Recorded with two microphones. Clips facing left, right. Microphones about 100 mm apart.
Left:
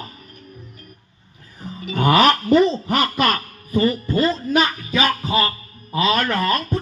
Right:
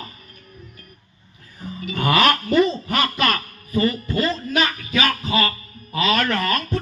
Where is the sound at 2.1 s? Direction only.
15° left (ahead or behind).